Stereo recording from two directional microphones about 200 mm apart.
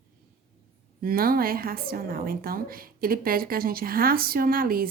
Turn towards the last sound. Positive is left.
turn(degrees=-45)  # may be behind; listen again after turning